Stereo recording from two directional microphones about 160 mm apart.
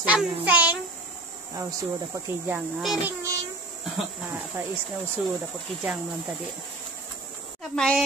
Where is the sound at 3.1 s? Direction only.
20° right (ahead or behind).